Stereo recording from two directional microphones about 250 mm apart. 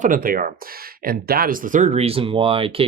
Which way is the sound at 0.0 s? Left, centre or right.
Right.